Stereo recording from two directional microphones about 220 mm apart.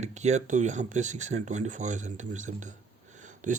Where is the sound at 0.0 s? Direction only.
30° right (ahead or behind).